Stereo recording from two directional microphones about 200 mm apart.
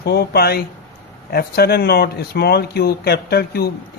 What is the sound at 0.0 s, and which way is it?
Speech, 55° left (ahead or behind).